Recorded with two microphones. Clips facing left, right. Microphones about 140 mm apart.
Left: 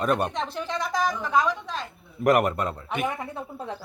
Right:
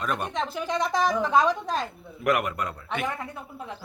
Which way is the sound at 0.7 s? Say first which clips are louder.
Right 3 dB; 25° right (ahead or behind).